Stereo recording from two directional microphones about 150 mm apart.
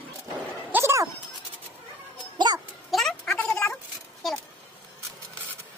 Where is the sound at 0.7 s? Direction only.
20° right (ahead or behind).